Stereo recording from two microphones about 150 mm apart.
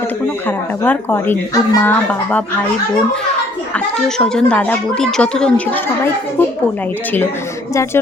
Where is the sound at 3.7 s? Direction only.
5° left (ahead or behind).